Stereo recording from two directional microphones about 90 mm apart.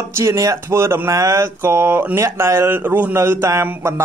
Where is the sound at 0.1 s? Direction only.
35° right (ahead or behind).